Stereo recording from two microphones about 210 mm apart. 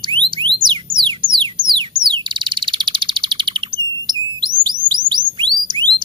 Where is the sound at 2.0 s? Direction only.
20° right (ahead or behind).